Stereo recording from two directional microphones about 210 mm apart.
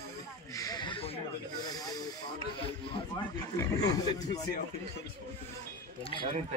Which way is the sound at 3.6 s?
15° left (ahead or behind).